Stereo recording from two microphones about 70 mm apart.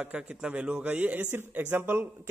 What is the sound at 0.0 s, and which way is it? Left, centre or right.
A man's voice, centre.